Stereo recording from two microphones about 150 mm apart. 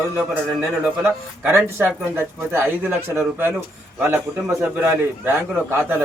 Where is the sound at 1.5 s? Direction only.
15° right (ahead or behind).